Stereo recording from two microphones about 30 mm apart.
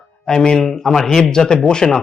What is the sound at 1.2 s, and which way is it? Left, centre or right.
Speech, left.